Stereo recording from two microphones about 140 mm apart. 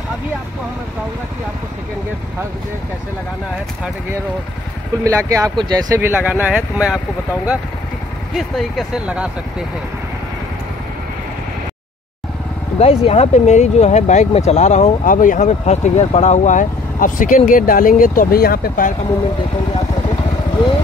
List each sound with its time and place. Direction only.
5.0 s speech: 20° right (ahead or behind)
5.9 s speech: 15° right (ahead or behind)
8.4 s speech: centre (ahead or behind)
12.7 s speech: 45° left (ahead or behind); by 18.9 s 80° left